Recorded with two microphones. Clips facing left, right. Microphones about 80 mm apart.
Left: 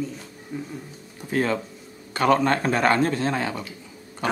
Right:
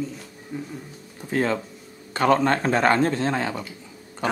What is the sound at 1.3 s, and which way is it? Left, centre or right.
A man's voice, right.